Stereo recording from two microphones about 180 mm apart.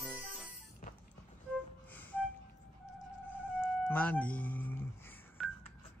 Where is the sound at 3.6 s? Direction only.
10° left (ahead or behind).